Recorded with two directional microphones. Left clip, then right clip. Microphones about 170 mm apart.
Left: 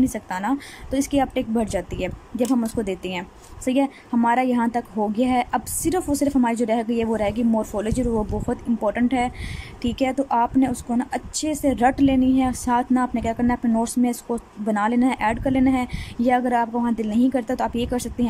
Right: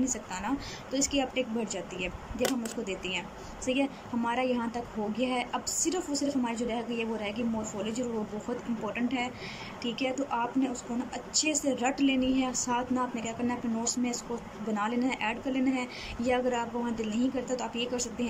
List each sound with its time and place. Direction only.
0.0 s a woman's voice: 45° left (ahead or behind)